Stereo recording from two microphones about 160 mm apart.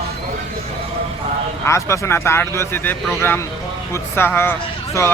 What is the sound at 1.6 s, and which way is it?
A man's voice, 15° left (ahead or behind).